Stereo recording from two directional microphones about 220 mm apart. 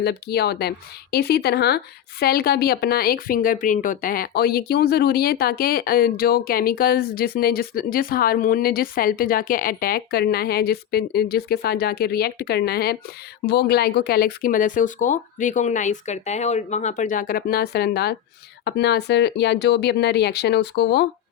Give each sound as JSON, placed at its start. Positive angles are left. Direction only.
{"t": 0.0, "sound": "a woman's voice", "side_deg": 45}